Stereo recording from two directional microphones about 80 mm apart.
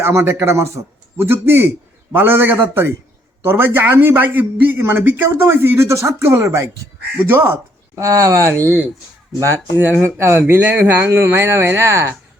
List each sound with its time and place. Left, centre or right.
0.0 s a man's voice: right
7.3 s speech: right
8.0 s a man's voice: right
10.0 s speech: right